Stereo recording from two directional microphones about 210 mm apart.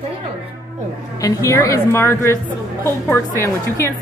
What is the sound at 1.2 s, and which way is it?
A woman's voice, 15° left (ahead or behind).